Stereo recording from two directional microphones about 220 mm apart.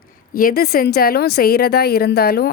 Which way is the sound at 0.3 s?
40° left (ahead or behind).